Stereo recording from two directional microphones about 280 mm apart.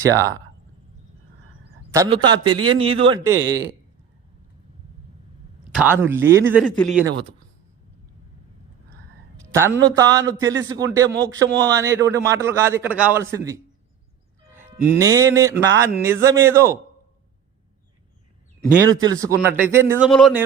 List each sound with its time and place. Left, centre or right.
0.0 s a man's voice: centre
1.9 s a man's voice: centre
5.7 s a man's voice: centre
9.6 s a man's voice: centre
11.1 s a man's voice: right
11.7 s a man's voice: centre
14.5 s music: centre
15.9 s a man's voice: centre
18.7 s a man's voice: centre